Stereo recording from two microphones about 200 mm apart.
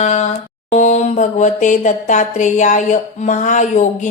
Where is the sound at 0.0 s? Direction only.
35° left (ahead or behind).